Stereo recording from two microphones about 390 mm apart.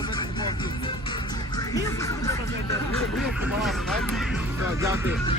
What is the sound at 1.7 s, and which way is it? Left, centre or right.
Speech, centre.